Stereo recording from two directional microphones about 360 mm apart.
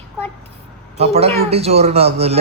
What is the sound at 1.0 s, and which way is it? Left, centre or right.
Speech, centre.